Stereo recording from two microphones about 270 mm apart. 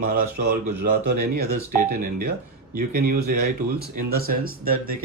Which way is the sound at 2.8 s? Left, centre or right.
Right.